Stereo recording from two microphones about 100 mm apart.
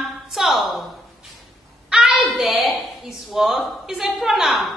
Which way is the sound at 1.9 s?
5° right (ahead or behind).